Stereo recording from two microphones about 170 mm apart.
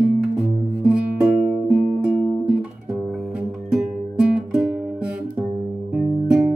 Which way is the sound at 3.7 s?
5° right (ahead or behind).